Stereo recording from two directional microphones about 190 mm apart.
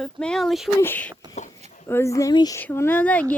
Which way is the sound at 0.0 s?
5° left (ahead or behind).